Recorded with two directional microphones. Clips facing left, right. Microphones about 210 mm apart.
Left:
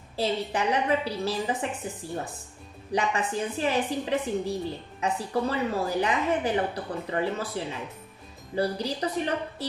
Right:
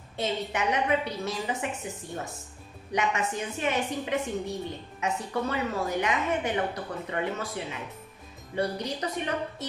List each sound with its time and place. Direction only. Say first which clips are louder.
0.1 s a woman's voice: left 3 dB; 35° left (ahead or behind)
2.9 s a woman's voice: left 1 dB; 30° left (ahead or behind)